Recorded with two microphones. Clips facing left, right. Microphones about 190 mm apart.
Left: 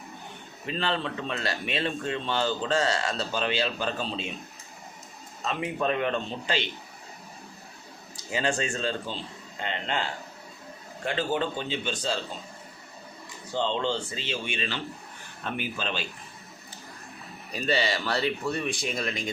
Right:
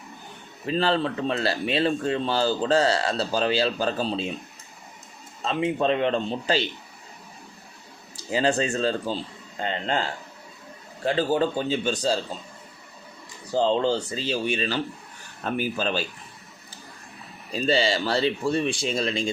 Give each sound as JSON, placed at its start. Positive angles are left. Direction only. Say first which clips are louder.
{"t": 0.7, "sound": "speech", "louder": "right 6 dB", "side_deg": -35}
{"t": 5.4, "sound": "speech", "louder": "right 5 dB", "side_deg": -30}
{"t": 8.1, "sound": "speech", "louder": "right 5 dB", "side_deg": -35}
{"t": 11.0, "sound": "speech", "louder": "right 5 dB", "side_deg": -35}
{"t": 13.5, "sound": "speech", "louder": "right 6 dB", "side_deg": -35}
{"t": 17.5, "sound": "speech", "louder": "right 4 dB", "side_deg": -30}